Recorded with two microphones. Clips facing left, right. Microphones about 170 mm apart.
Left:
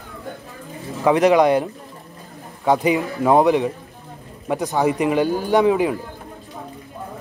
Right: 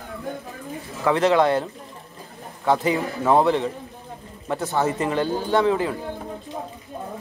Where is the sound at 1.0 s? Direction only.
15° left (ahead or behind).